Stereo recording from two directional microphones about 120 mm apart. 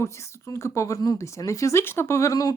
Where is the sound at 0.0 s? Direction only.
25° left (ahead or behind).